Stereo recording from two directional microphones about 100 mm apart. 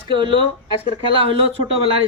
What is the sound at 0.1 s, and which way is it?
A man's voice, 55° right (ahead or behind).